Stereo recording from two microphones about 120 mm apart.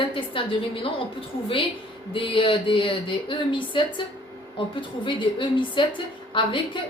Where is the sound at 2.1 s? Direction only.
45° left (ahead or behind).